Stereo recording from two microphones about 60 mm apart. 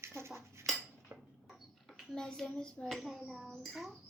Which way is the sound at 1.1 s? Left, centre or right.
Right.